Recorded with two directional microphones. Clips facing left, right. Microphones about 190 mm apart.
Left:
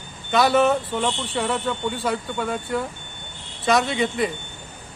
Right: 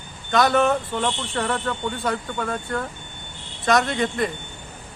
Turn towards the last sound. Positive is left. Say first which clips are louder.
# even
turn(degrees=0)  # may be behind; listen again after turning